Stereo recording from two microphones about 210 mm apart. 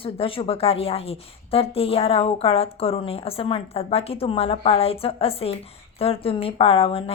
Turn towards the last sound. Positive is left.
turn(degrees=25)  # may be behind; listen again after turning